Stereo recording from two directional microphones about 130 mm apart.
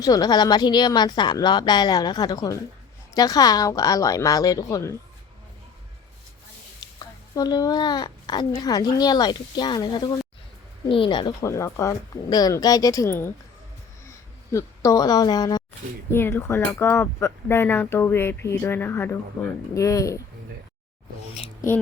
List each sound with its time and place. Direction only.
0.0 s a child's voice: 30° left (ahead or behind)
7.3 s a child's voice: 30° left (ahead or behind)
11.4 s speech: 25° left (ahead or behind)
14.5 s speech: 25° left (ahead or behind)
16.1 s speech: 20° left (ahead or behind)